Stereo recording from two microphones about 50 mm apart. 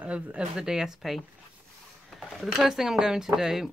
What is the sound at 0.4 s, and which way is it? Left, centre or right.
Speech, centre.